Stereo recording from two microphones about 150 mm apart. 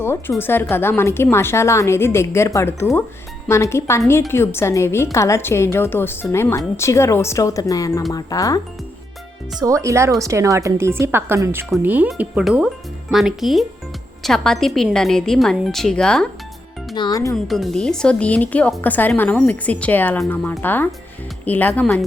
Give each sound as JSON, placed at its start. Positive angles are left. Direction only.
{"t": 0.0, "sound": "a woman's voice", "side_deg": 15}
{"t": 9.6, "sound": "speech", "side_deg": -20}
{"t": 16.9, "sound": "speech", "side_deg": 30}
{"t": 17.3, "sound": "a woman's voice", "side_deg": 0}